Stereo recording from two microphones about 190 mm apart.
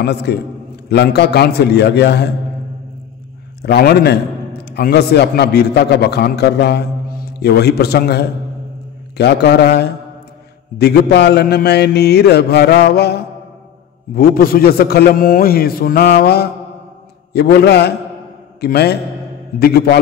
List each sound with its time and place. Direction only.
0.0 s mantra: 60° left (ahead or behind)
3.6 s mantra: 60° left (ahead or behind)
14.1 s a man's voice: 50° left (ahead or behind)
17.3 s mantra: 55° left (ahead or behind)